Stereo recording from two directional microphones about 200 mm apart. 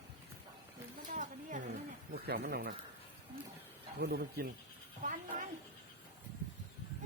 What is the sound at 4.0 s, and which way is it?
Speech, 55° right (ahead or behind).